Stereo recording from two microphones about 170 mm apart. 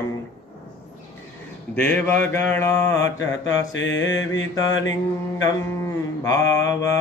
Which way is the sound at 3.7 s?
90° left.